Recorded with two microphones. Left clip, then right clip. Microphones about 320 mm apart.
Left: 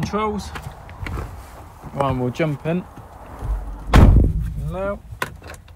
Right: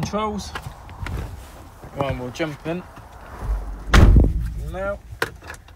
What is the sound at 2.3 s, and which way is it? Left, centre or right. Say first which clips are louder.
Speech: left 4 dB; left.